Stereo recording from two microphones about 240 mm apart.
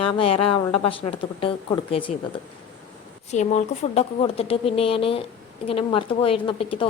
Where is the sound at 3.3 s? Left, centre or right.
Left.